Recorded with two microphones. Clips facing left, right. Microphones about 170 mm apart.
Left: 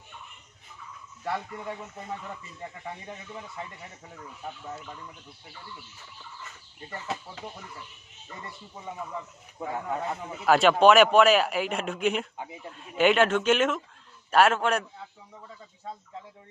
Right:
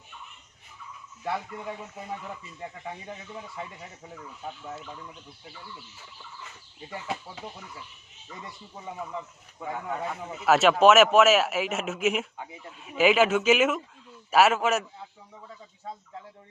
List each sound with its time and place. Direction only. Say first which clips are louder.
1.2 s speech: even; 5° right (ahead or behind)
6.9 s speech: right 1 dB; 10° right (ahead or behind)
9.6 s speech: left 1 dB; 30° left (ahead or behind)
10.4 s speech: even; centre (ahead or behind)